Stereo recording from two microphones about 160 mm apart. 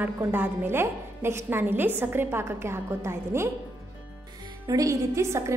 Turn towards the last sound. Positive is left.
turn(degrees=-15)  # may be behind; listen again after turning